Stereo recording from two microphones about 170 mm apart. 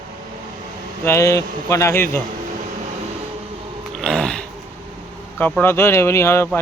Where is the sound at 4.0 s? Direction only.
5° left (ahead or behind).